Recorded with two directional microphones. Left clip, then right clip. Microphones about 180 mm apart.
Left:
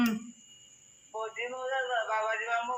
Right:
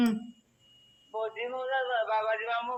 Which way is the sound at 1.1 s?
45° right (ahead or behind).